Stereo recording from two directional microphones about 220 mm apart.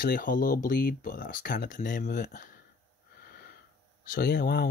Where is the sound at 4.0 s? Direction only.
40° left (ahead or behind).